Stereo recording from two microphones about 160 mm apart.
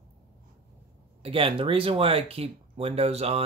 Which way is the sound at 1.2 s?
35° right (ahead or behind).